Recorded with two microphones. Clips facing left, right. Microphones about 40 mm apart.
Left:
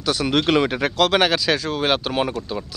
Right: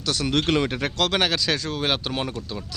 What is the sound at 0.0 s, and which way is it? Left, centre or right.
Speech, centre.